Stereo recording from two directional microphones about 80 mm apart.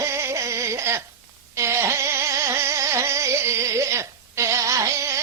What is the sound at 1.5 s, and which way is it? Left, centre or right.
Carnatic music, right.